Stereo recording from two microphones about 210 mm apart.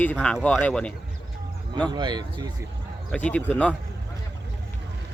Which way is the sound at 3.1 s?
5° left (ahead or behind).